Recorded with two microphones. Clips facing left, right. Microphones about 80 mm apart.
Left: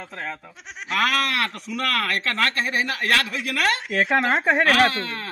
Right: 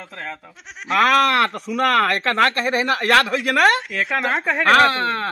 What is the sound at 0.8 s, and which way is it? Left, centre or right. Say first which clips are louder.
Speech: right 7 dB; right.